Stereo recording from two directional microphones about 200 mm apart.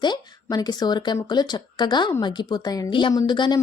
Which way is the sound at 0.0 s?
20° left (ahead or behind).